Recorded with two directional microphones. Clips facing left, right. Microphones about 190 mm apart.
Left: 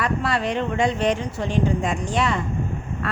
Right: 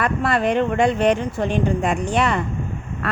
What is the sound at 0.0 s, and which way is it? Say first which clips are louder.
Speech: right 3 dB; 50° right (ahead or behind).